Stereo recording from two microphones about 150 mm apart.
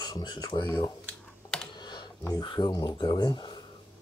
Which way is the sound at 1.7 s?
30° left (ahead or behind).